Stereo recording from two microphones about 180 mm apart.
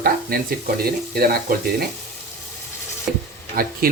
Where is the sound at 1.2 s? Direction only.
55° right (ahead or behind).